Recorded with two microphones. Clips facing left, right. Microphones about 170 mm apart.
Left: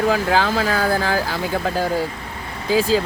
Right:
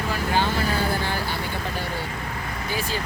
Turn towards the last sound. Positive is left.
turn(degrees=90)